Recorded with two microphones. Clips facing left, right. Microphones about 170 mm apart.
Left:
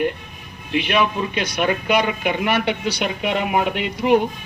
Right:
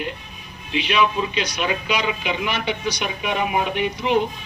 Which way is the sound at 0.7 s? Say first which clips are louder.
Left 1 dB; 55° left (ahead or behind).